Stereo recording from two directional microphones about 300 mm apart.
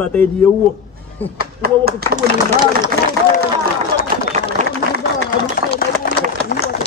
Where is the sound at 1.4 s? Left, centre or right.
Right.